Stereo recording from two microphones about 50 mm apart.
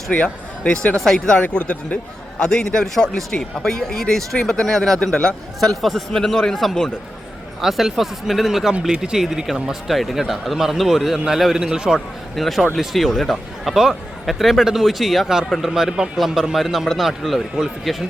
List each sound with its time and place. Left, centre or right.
0.1 s a man's voice: left
1.5 s speech: left
2.4 s a man's voice: centre
5.5 s a man's voice: centre
7.6 s speech: centre
9.9 s speech: centre
12.4 s speech: centre
15.7 s speech: centre